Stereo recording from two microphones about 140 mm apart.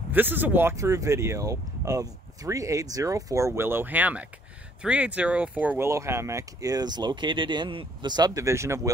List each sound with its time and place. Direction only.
0.1 s speech: 15° right (ahead or behind)